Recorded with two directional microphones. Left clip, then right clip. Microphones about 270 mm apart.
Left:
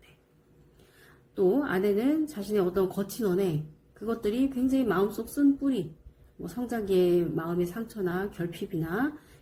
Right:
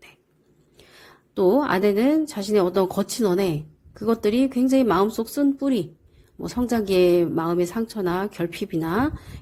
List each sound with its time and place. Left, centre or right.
1.5 s a woman's voice: right